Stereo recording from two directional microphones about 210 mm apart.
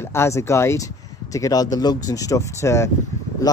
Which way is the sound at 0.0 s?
10° left (ahead or behind).